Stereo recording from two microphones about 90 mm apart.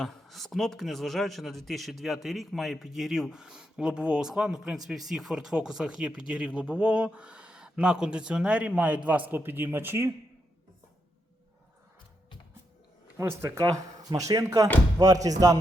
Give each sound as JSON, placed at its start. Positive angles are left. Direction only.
{"t": 0.0, "sound": "a man's voice", "side_deg": 0}
{"t": 13.1, "sound": "speech", "side_deg": -30}